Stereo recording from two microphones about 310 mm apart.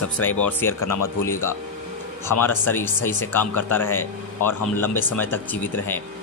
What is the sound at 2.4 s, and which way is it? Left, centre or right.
Speech, centre.